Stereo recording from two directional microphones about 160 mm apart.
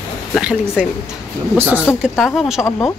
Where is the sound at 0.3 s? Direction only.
5° right (ahead or behind).